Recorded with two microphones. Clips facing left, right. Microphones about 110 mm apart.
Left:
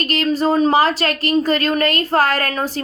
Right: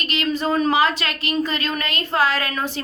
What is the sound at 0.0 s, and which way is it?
A woman's voice, 45° left (ahead or behind).